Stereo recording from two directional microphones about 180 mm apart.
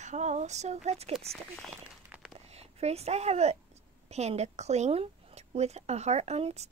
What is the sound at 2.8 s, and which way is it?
Speech, 35° right (ahead or behind).